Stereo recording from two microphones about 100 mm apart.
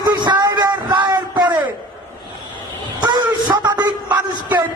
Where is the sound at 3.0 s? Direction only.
45° right (ahead or behind).